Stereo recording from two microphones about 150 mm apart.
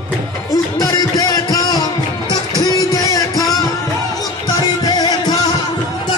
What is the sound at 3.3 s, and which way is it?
Music, centre (ahead or behind).